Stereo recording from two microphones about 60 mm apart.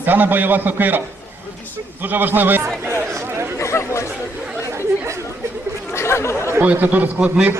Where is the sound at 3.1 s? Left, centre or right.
Right.